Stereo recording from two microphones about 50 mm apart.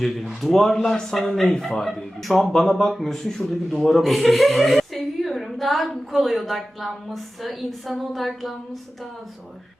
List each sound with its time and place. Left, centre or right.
0.4 s speech: centre